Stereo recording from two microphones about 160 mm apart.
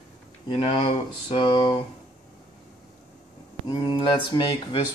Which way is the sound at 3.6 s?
30° left (ahead or behind).